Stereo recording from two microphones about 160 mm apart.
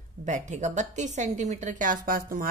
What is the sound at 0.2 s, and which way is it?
A woman's voice, 50° right (ahead or behind).